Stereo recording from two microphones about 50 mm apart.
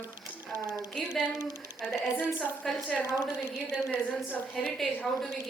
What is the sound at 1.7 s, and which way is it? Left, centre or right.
Speech, centre.